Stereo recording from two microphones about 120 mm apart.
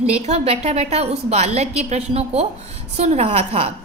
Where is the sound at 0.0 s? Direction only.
65° right (ahead or behind).